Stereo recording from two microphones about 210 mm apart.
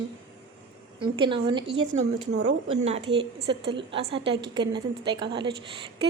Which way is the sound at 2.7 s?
30° right (ahead or behind).